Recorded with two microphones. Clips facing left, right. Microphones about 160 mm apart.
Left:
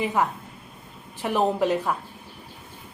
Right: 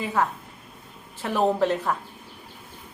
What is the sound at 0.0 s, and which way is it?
Speech, 15° left (ahead or behind).